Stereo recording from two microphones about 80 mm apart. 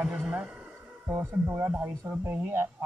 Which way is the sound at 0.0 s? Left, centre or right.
Centre.